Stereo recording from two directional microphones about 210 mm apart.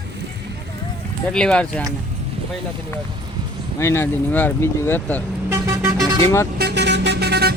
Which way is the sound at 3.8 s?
10° left (ahead or behind).